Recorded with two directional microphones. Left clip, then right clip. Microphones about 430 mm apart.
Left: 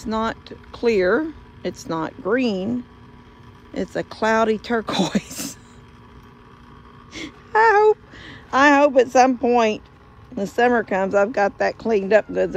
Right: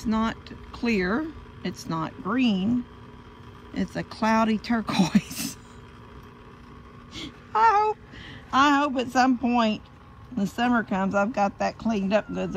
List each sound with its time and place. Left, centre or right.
0.0 s speech: centre
3.7 s speech: centre
7.2 s speech: centre